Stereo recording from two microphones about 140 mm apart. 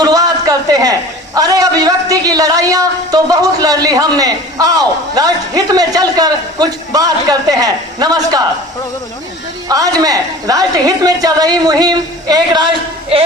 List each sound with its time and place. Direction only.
0.0 s a sound: 25° right (ahead or behind)
1.4 s a woman's voice: 25° right (ahead or behind)
9.6 s a woman's voice: 25° right (ahead or behind)